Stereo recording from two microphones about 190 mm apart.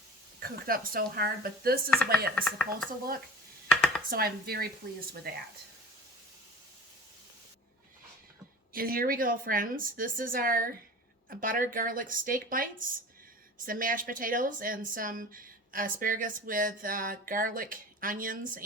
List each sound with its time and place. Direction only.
0.3 s speech: 50° right (ahead or behind)
2.3 s speech: centre (ahead or behind)
3.7 s a sound: 5° left (ahead or behind)
4.1 s speech: 55° right (ahead or behind)
8.7 s speech: 50° right (ahead or behind)